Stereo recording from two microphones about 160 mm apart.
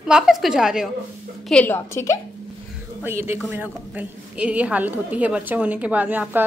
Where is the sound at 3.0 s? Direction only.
15° right (ahead or behind).